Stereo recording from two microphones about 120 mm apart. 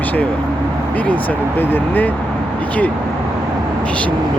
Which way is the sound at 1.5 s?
15° left (ahead or behind).